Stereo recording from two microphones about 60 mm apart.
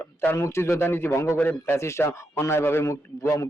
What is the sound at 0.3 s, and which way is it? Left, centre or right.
Speech, left.